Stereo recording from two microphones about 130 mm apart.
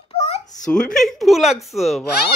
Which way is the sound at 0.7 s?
5° left (ahead or behind).